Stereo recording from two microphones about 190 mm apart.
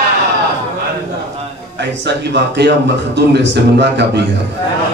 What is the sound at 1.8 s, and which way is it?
A man's voice, 65° right (ahead or behind).